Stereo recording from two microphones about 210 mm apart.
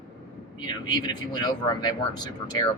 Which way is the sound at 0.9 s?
20° left (ahead or behind).